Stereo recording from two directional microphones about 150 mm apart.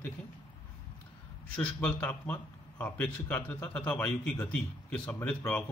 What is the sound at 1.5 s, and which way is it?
A man's voice, 10° left (ahead or behind).